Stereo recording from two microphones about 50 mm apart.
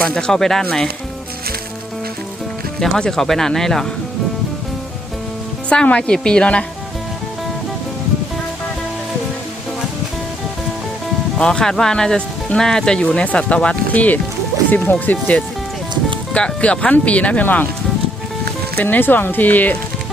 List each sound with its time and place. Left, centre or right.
0.0 s speech: centre
2.8 s speech: centre
5.6 s speech: left
11.3 s speech: centre
13.9 s speech: left
17.4 s speech: left
18.8 s speech: left